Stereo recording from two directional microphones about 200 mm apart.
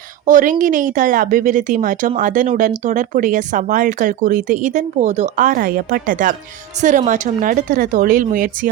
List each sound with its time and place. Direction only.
0.3 s a woman's voice: 40° right (ahead or behind)